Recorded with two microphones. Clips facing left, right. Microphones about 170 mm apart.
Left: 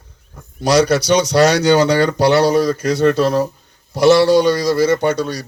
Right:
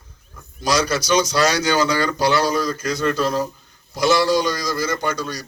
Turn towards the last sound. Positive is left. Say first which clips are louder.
# left 7 dB
turn(degrees=65)  # may be behind; listen again after turning